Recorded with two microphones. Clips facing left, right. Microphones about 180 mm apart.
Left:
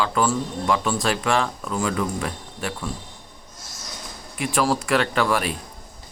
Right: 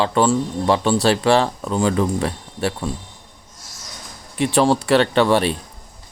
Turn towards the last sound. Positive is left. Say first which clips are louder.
# right 6 dB
turn(degrees=-30)  # may be behind; listen again after turning